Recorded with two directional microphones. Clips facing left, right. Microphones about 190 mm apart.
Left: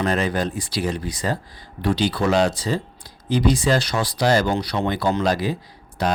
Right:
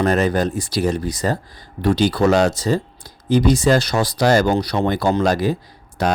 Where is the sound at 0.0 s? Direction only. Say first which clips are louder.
Right 4 dB; 45° right (ahead or behind).